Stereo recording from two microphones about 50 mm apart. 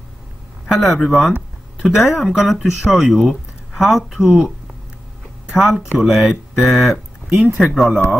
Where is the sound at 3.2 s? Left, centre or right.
Centre.